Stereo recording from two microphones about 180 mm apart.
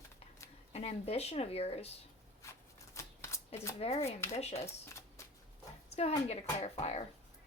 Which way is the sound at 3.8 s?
35° left (ahead or behind).